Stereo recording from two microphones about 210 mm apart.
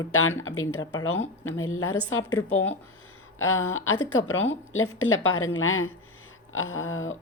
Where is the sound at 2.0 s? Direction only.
80° left.